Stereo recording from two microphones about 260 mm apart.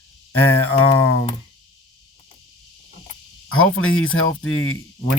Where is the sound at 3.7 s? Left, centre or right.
Left.